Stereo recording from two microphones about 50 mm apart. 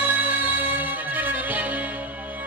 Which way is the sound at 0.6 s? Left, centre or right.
Right.